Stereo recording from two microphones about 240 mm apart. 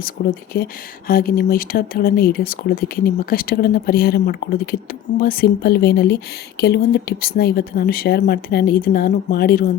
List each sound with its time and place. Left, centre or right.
0.2 s speech: left